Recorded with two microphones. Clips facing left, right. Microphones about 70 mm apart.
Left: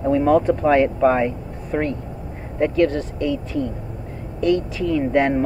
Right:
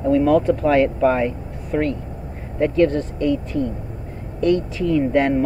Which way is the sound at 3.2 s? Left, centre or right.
Right.